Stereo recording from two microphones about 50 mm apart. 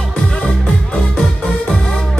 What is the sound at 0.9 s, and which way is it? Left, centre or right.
Music, centre.